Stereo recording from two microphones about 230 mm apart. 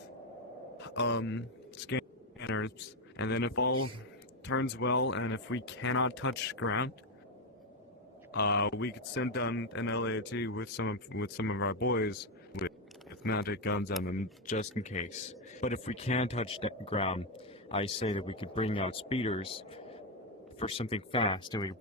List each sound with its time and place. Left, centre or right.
0.8 s speech: left
8.3 s speech: left
14.5 s speech: left